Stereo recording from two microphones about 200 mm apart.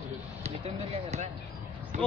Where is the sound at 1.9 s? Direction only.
35° right (ahead or behind).